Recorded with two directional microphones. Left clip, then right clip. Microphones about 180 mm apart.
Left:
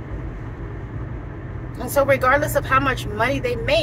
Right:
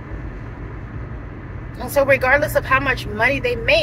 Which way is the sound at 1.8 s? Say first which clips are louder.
Right 2 dB; 15° left (ahead or behind).